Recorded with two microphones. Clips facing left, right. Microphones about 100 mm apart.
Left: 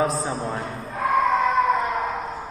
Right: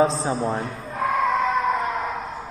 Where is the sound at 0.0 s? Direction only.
25° right (ahead or behind).